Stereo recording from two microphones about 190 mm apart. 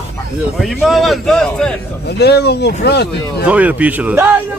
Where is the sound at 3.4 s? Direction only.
5° right (ahead or behind).